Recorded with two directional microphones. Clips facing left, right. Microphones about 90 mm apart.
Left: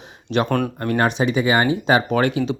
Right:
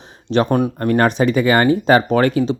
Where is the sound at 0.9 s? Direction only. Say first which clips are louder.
Right 4 dB; 45° right (ahead or behind).